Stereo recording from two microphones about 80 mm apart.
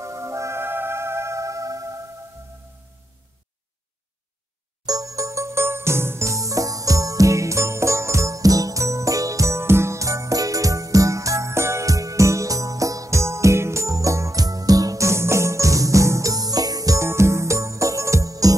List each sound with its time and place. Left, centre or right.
0.0 s music: right
4.8 s music: right